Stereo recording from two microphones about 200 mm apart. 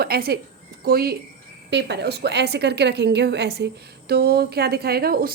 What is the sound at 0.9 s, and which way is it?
A woman's voice, 50° right (ahead or behind).